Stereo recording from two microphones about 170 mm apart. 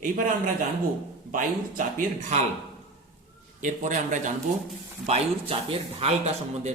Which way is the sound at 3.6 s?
50° right (ahead or behind).